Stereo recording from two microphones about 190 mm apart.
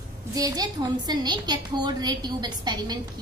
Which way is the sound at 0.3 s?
20° right (ahead or behind).